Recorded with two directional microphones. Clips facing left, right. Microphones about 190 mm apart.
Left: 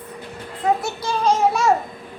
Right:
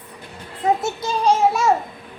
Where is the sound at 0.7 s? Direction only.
20° right (ahead or behind).